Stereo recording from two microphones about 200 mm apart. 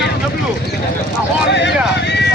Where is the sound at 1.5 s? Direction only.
60° left (ahead or behind).